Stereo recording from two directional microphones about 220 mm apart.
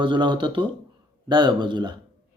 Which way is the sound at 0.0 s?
20° right (ahead or behind).